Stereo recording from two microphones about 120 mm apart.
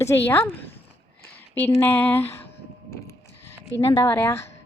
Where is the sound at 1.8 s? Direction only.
15° left (ahead or behind).